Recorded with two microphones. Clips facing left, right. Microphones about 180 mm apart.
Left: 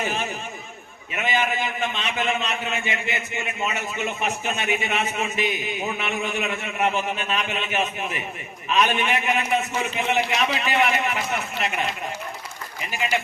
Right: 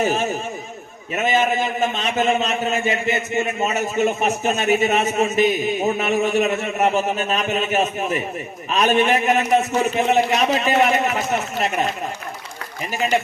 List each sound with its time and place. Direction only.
0.0 s a man's voice: 40° right (ahead or behind)
12.9 s a man's voice: 40° right (ahead or behind)